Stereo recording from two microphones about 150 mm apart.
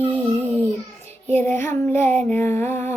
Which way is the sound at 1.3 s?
10° left (ahead or behind).